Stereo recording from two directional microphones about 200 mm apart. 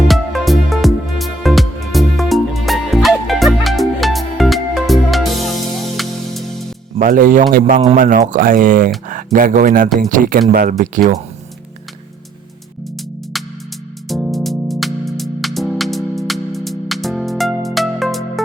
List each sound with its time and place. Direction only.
0.1 s music: centre (ahead or behind)
7.0 s speech: 45° right (ahead or behind)
13.3 s music: centre (ahead or behind)